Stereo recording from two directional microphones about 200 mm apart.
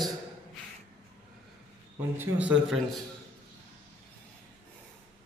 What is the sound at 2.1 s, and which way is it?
Speech, 5° right (ahead or behind).